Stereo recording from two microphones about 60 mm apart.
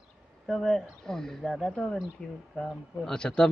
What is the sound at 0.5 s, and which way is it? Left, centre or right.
Speech, centre.